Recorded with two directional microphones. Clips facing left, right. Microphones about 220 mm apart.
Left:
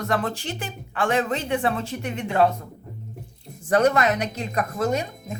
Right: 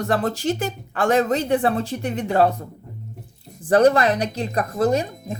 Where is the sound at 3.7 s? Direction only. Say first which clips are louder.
Right 4 dB; 35° right (ahead or behind).